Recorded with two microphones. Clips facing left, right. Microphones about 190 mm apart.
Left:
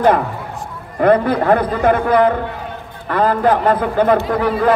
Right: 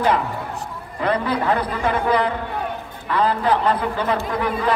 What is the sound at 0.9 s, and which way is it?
A man's voice, 50° left (ahead or behind).